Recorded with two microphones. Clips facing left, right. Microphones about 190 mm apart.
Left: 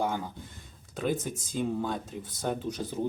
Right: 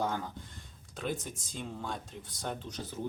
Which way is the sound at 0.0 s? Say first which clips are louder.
Left 3 dB; 10° left (ahead or behind).